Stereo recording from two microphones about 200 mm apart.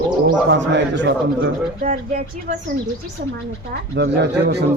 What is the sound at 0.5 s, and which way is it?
Speech, 65° right (ahead or behind).